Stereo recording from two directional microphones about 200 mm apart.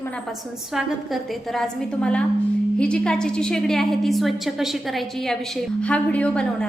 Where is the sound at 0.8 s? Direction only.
Centre (ahead or behind).